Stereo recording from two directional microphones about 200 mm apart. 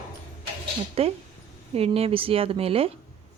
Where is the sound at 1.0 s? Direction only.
30° right (ahead or behind).